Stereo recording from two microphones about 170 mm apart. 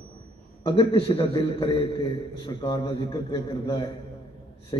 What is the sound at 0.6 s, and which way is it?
A man's voice, 30° left (ahead or behind).